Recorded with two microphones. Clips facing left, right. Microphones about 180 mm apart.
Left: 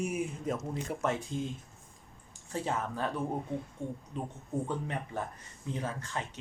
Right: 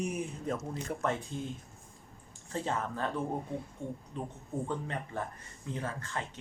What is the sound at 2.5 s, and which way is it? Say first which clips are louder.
Speech: even; 10° left (ahead or behind).